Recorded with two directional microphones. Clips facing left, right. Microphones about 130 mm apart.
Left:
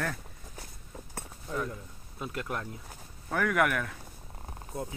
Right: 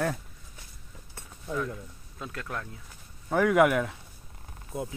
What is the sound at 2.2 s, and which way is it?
Speech, 20° left (ahead or behind).